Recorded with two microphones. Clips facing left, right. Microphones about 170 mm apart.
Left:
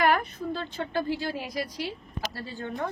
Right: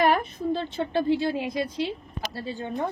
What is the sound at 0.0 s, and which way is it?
A woman's voice, 25° right (ahead or behind).